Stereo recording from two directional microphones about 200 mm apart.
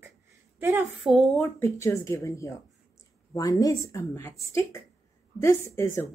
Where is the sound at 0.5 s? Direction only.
10° right (ahead or behind).